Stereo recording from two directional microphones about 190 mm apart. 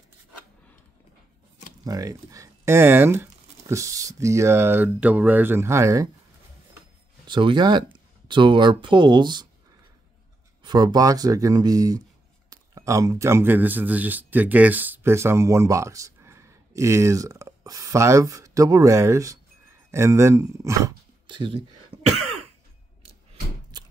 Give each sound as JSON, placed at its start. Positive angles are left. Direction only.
{"t": 1.9, "sound": "speech", "side_deg": -20}
{"t": 7.2, "sound": "speech", "side_deg": -25}
{"t": 10.6, "sound": "speech", "side_deg": -20}
{"t": 23.7, "sound": "a sound", "side_deg": -20}